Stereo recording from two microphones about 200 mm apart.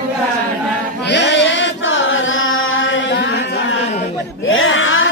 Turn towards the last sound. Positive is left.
turn(degrees=75)  # may be behind; listen again after turning